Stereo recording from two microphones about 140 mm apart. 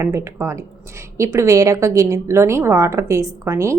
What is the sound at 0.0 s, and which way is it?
A woman's voice, 20° right (ahead or behind).